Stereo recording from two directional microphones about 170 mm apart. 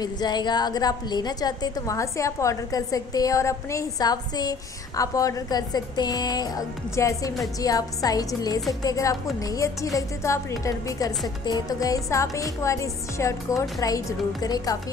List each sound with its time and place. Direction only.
0.0 s a woman's voice: 25° left (ahead or behind)